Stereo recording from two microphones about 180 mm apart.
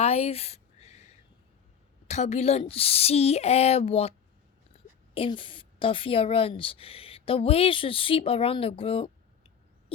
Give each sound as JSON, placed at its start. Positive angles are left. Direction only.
{"t": 0.0, "sound": "a sound", "side_deg": 35}
{"t": 2.0, "sound": "a woman's voice", "side_deg": 40}
{"t": 5.1, "sound": "a woman's voice", "side_deg": 30}